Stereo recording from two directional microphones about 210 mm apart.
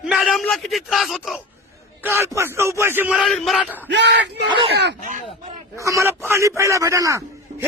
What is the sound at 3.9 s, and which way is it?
Speech, 55° right (ahead or behind).